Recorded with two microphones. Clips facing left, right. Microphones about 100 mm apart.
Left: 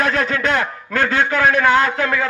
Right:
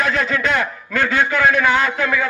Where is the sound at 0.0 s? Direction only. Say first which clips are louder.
Left 1 dB; 35° left (ahead or behind).